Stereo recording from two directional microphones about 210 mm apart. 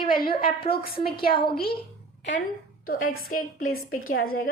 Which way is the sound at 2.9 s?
40° left (ahead or behind).